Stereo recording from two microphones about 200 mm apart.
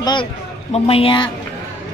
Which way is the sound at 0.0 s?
25° left (ahead or behind).